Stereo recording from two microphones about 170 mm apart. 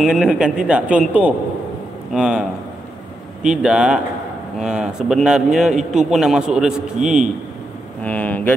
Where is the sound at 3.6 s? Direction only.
5° right (ahead or behind).